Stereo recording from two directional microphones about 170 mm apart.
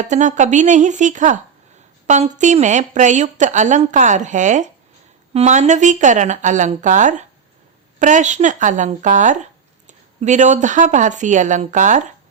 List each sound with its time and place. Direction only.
0.0 s speech: 45° right (ahead or behind)